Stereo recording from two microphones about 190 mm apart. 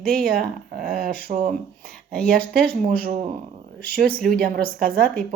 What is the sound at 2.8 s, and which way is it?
Speech, 50° right (ahead or behind).